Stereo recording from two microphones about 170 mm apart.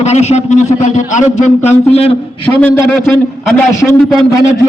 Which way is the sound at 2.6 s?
5° left (ahead or behind).